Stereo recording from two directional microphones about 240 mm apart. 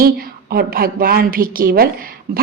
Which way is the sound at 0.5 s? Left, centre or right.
Right.